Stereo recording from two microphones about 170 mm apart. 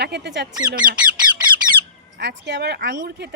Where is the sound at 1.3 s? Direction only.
30° right (ahead or behind).